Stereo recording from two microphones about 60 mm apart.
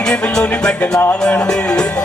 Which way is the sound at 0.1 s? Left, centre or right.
Centre.